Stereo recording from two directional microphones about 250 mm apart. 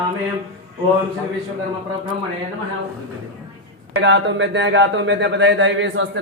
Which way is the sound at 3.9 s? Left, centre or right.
Right.